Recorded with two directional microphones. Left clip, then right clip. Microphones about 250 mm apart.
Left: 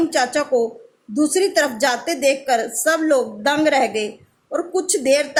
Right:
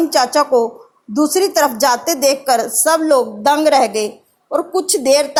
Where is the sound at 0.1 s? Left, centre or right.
Centre.